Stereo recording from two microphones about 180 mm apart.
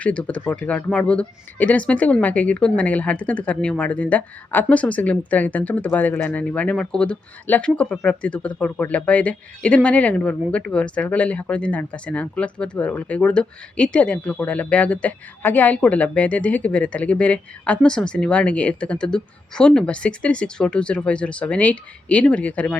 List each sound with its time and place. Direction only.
0.0 s speech: 5° left (ahead or behind)